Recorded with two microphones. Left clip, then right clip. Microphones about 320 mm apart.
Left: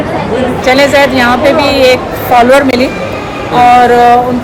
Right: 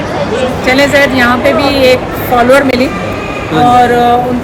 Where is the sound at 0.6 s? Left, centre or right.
Centre.